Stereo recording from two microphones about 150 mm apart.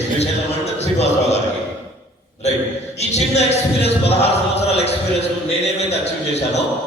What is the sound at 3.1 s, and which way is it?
A man's voice, 45° left (ahead or behind).